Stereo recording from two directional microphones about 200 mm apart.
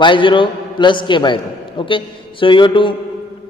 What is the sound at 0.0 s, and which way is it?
A man's voice, 25° left (ahead or behind).